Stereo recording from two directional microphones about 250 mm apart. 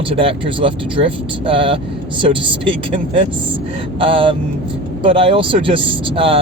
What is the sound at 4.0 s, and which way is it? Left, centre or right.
Speech, right.